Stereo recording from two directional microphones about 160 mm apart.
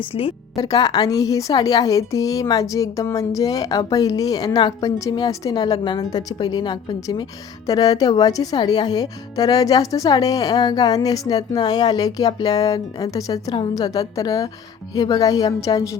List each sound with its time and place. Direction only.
0.1 s a woman's voice: 35° left (ahead or behind)